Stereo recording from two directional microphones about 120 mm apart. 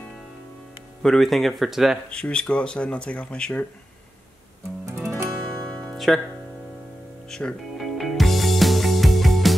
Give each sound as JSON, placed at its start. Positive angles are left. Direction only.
{"t": 1.0, "sound": "speech", "side_deg": 0}
{"t": 2.0, "sound": "speech", "side_deg": 10}
{"t": 4.8, "sound": "music", "side_deg": -25}
{"t": 5.6, "sound": "music", "side_deg": 5}
{"t": 7.2, "sound": "music", "side_deg": 5}